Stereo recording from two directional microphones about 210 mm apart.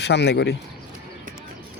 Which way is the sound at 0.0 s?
55° left (ahead or behind).